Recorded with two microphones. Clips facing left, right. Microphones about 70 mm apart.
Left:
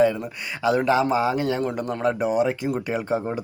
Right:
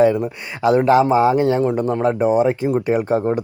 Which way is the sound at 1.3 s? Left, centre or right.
Right.